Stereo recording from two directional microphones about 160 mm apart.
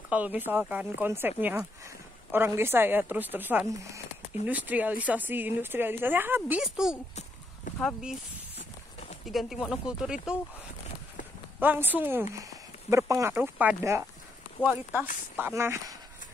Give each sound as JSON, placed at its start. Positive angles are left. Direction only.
{"t": 0.1, "sound": "speech", "side_deg": -10}
{"t": 9.2, "sound": "speech", "side_deg": 0}
{"t": 11.6, "sound": "speech", "side_deg": -10}